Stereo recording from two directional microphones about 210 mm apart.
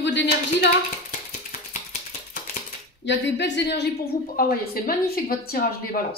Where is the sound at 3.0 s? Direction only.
60° left (ahead or behind).